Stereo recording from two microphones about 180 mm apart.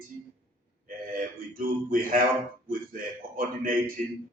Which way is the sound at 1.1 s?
50° right (ahead or behind).